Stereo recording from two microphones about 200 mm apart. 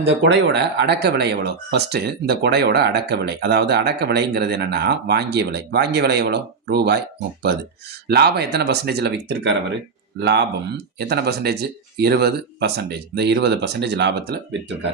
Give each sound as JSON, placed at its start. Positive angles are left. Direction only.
{"t": 0.0, "sound": "speech", "side_deg": -60}
{"t": 8.0, "sound": "speech", "side_deg": -55}